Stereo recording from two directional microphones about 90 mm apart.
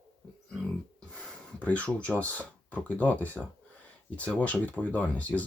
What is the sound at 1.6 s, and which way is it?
Speech, 15° left (ahead or behind).